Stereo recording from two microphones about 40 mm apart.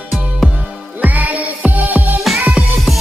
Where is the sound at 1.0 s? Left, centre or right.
Right.